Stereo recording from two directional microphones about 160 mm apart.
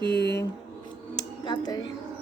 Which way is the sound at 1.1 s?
25° left (ahead or behind).